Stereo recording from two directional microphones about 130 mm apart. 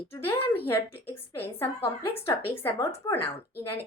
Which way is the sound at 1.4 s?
20° left (ahead or behind).